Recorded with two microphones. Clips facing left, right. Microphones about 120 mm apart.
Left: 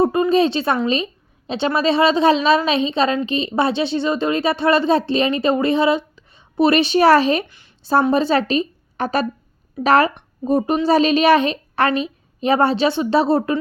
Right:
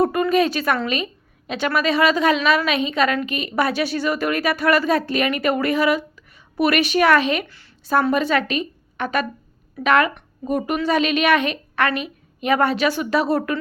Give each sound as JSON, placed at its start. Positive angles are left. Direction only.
{"t": 0.0, "sound": "a woman's voice", "side_deg": 25}
{"t": 7.4, "sound": "a woman's voice", "side_deg": 20}
{"t": 7.9, "sound": "a child's voice", "side_deg": 30}